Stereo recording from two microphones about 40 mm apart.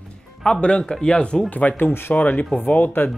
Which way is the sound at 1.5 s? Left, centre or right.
Left.